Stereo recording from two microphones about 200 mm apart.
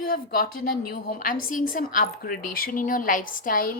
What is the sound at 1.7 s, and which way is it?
A woman's voice, 45° left (ahead or behind).